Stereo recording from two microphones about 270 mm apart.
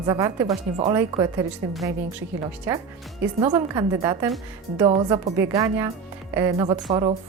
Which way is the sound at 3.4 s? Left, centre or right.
Centre.